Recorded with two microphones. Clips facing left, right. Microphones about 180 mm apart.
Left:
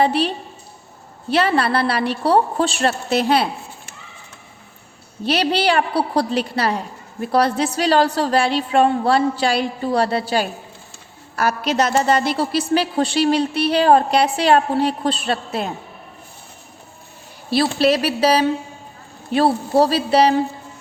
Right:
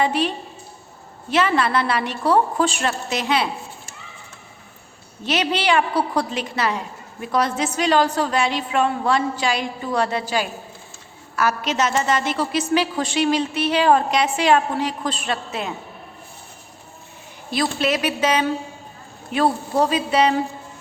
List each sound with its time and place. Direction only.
0.0 s a woman's voice: 35° left (ahead or behind)
5.2 s a woman's voice: 35° left (ahead or behind)
17.5 s a woman's voice: 35° left (ahead or behind)